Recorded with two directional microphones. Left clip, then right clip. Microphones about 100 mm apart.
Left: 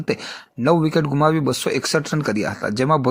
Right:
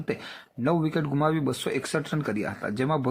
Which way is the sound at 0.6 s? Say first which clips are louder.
Left 9 dB; 30° left (ahead or behind).